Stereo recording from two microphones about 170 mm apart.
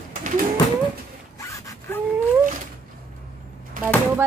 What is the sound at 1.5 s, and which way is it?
Gasp, 20° left (ahead or behind).